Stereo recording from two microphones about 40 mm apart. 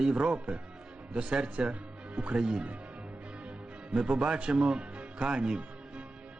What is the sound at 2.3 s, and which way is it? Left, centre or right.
Speech, centre.